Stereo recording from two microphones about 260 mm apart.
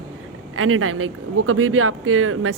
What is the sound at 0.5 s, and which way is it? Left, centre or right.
Speech, right.